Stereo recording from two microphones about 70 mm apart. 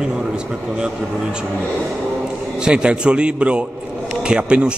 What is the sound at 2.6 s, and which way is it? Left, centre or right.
A man's voice, centre.